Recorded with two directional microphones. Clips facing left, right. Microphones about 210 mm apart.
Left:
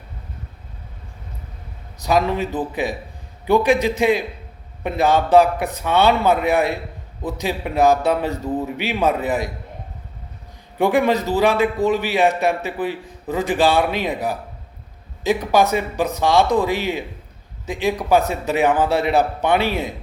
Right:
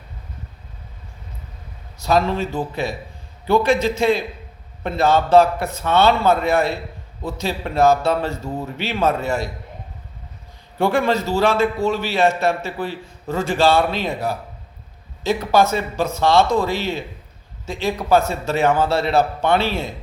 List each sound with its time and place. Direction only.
2.0 s a man's voice: 15° left (ahead or behind)
10.8 s a man's voice: 15° left (ahead or behind)